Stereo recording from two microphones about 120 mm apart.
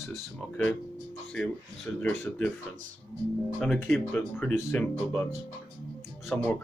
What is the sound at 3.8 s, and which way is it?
Speech, 15° left (ahead or behind).